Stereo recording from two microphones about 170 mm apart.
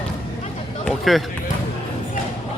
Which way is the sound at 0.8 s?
5° left (ahead or behind).